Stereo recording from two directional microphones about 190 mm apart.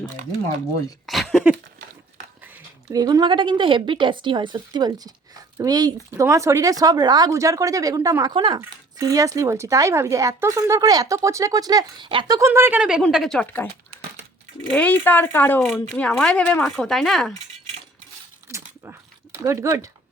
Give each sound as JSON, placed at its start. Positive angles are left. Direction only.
{"t": 1.0, "sound": "speech", "side_deg": 0}
{"t": 2.9, "sound": "a woman's voice", "side_deg": -20}
{"t": 14.7, "sound": "speech", "side_deg": 5}
{"t": 18.4, "sound": "a sound", "side_deg": -15}
{"t": 19.4, "sound": "speech", "side_deg": -15}